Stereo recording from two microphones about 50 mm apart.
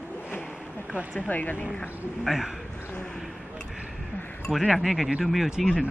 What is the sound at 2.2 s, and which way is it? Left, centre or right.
Speech, centre.